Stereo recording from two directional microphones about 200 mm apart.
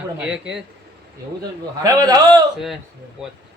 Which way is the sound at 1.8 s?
20° right (ahead or behind).